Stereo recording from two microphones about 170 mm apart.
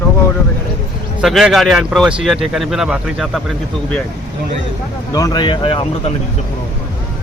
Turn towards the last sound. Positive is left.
turn(degrees=35)  # may be behind; listen again after turning